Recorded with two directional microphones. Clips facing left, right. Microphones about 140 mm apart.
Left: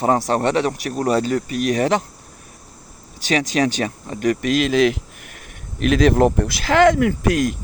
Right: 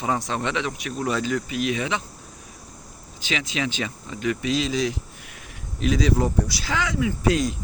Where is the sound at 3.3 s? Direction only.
45° left (ahead or behind); by 7.4 s 65° left (ahead or behind).